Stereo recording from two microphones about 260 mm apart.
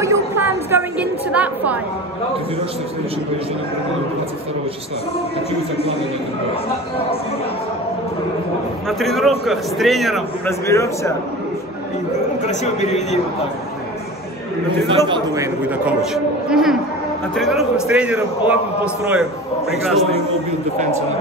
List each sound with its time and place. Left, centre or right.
0.0 s a sound: centre
1.3 s a man's voice: centre
8.8 s a man's voice: centre
10.7 s speech: centre
12.4 s a man's voice: left
14.9 s a man's voice: centre
19.7 s a man's voice: centre